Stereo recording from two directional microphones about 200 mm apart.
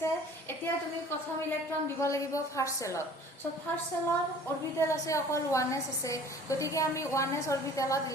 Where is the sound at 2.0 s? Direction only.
15° left (ahead or behind).